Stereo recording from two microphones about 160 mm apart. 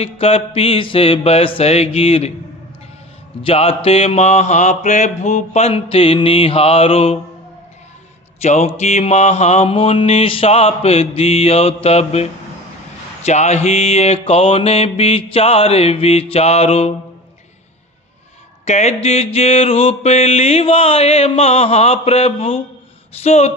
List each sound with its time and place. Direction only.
0.0 s mantra: 40° left (ahead or behind)
3.4 s mantra: 35° left (ahead or behind)
8.4 s mantra: 45° left (ahead or behind)
18.6 s a sound: 45° left (ahead or behind)
19.0 s mantra: 40° left (ahead or behind)